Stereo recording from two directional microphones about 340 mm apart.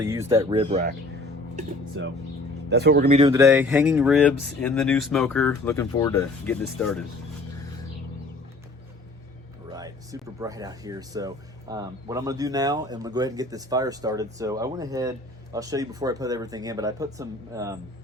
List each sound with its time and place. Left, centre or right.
0.0 s speech: centre
2.0 s speech: right
3.2 s speech: centre
9.7 s speech: centre